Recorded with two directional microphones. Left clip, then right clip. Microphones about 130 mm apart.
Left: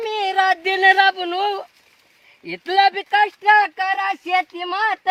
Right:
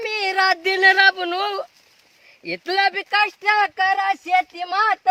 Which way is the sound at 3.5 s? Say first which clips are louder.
Left 5 dB; 10° right (ahead or behind).